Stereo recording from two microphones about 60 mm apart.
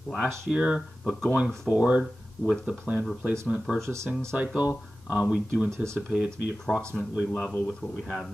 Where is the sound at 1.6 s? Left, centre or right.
Right.